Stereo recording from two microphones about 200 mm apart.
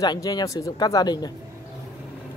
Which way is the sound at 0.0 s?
20° left (ahead or behind).